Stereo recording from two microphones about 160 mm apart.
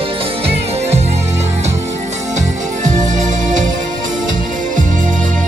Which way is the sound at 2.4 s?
50° right (ahead or behind).